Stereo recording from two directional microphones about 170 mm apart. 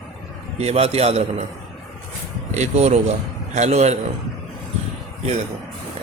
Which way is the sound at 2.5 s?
40° right (ahead or behind).